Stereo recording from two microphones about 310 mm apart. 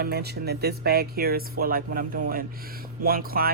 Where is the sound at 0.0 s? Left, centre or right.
Right.